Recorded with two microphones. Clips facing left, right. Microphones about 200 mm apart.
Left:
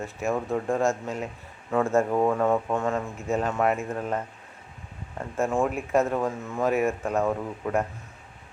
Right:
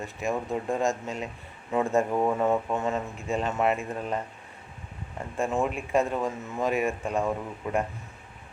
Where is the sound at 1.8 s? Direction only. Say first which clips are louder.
Left 2 dB; 15° right (ahead or behind).